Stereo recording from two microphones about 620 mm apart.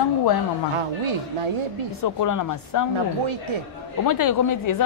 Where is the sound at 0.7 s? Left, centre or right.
Right.